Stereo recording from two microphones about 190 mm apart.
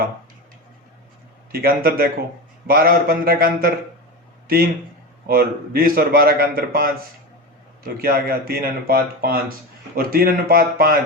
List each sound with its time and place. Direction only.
1.5 s a man's voice: 50° right (ahead or behind)
7.9 s a man's voice: 55° right (ahead or behind)